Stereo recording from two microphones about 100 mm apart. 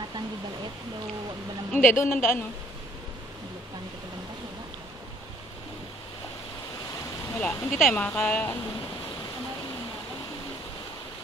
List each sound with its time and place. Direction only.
1.7 s a woman's voice: 15° left (ahead or behind)
7.3 s speech: 15° left (ahead or behind)